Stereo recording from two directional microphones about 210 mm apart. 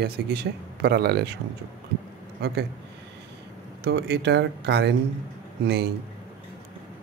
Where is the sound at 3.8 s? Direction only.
50° right (ahead or behind).